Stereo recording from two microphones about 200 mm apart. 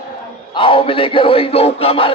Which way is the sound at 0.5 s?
25° left (ahead or behind).